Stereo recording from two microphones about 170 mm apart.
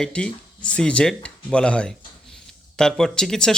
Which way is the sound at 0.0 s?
5° left (ahead or behind).